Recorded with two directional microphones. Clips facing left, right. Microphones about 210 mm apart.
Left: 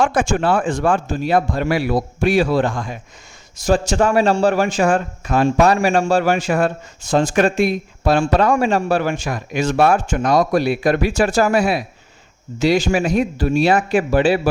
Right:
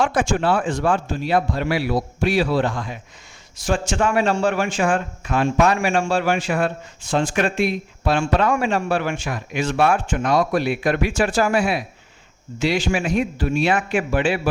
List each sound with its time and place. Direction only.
0.0 s a man's voice: 50° left (ahead or behind)